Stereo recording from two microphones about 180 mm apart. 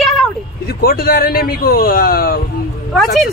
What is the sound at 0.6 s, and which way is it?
A man's voice, 55° left (ahead or behind).